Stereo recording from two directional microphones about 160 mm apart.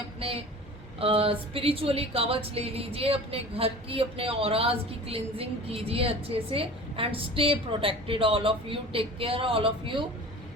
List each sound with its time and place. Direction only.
0.2 s speech: 35° right (ahead or behind)